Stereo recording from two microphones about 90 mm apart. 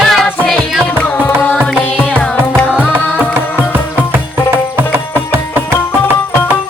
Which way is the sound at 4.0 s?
25° right (ahead or behind).